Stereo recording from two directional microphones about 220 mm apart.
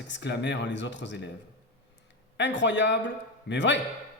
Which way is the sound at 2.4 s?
55° left (ahead or behind).